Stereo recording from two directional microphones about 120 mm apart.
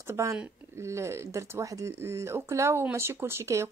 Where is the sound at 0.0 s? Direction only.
20° right (ahead or behind).